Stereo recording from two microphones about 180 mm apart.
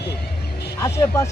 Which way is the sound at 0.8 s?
15° left (ahead or behind).